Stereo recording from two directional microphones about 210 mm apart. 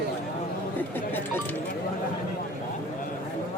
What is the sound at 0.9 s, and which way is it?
Speech, 10° left (ahead or behind).